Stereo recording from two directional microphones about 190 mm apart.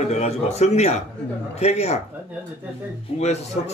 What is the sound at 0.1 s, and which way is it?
Speech, 35° left (ahead or behind).